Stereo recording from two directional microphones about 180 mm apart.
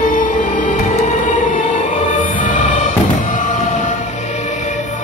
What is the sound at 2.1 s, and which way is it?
Music, 45° left (ahead or behind).